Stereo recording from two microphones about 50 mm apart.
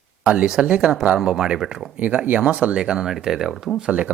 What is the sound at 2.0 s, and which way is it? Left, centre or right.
Speech, right.